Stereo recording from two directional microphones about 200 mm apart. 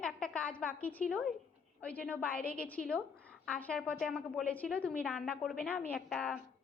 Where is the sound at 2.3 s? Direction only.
50° left (ahead or behind).